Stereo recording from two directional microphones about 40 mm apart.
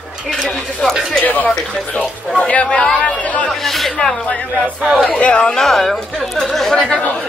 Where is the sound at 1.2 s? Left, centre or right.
Left.